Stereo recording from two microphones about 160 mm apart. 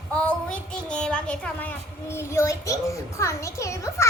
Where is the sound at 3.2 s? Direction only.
20° left (ahead or behind).